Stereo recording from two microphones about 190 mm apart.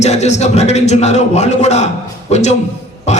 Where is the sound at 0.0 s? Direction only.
35° left (ahead or behind).